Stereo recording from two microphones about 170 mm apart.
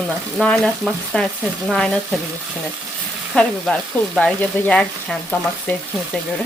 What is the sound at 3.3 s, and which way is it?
Frying, 5° left (ahead or behind).